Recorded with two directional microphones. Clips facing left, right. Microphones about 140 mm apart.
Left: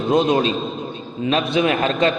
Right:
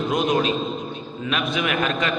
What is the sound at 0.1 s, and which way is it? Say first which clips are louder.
A man's voice: left 6 dB; 30° left (ahead or behind).